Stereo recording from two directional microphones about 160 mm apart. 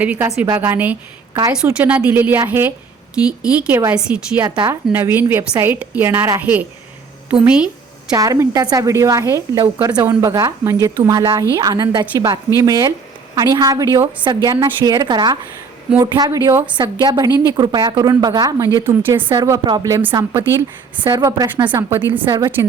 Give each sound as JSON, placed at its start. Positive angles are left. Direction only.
{"t": 0.0, "sound": "a woman's voice", "side_deg": -10}
{"t": 4.4, "sound": "a woman's voice", "side_deg": -25}
{"t": 4.9, "sound": "a woman's voice", "side_deg": -15}
{"t": 8.1, "sound": "a woman's voice", "side_deg": -20}
{"t": 16.7, "sound": "a woman's voice", "side_deg": -30}